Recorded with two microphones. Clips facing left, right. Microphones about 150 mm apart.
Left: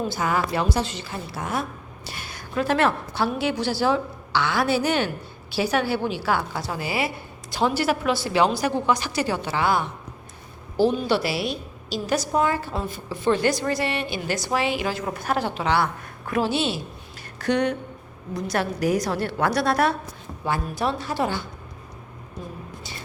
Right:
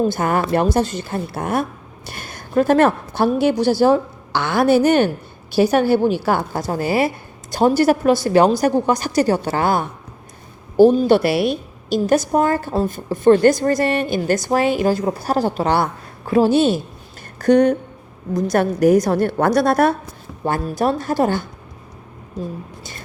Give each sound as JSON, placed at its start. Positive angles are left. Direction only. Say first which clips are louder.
{"t": 0.1, "sound": "a woman's voice", "louder": "right 6 dB", "side_deg": -55}